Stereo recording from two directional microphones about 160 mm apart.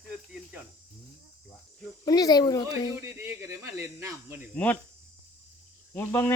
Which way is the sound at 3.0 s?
15° right (ahead or behind).